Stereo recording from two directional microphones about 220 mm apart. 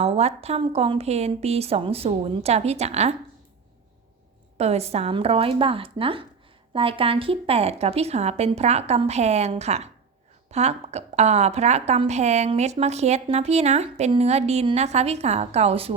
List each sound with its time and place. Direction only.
0.0 s a woman's voice: 30° right (ahead or behind)
4.5 s a woman's voice: 30° right (ahead or behind)